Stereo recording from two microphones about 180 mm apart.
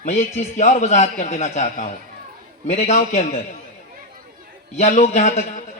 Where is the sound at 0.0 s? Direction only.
40° left (ahead or behind).